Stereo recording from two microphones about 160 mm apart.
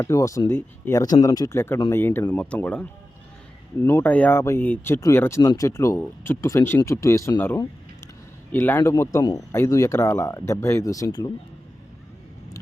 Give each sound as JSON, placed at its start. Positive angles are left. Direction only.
{"t": 0.0, "sound": "speech", "side_deg": 20}
{"t": 3.8, "sound": "speech", "side_deg": 10}